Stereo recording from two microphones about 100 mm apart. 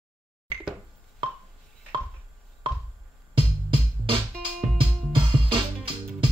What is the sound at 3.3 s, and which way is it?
Music, 60° right (ahead or behind).